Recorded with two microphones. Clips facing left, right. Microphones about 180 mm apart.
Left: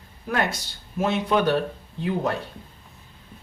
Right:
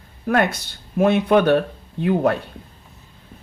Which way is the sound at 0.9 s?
60° right (ahead or behind).